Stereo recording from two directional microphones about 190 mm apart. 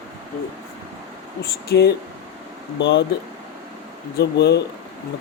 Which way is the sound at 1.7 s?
55° left (ahead or behind).